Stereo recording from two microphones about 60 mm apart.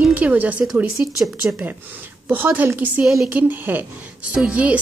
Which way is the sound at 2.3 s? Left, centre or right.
Right.